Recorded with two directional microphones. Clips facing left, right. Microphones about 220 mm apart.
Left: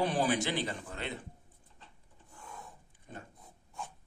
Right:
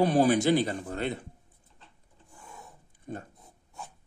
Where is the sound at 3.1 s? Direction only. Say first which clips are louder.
Right 9 dB; 45° right (ahead or behind).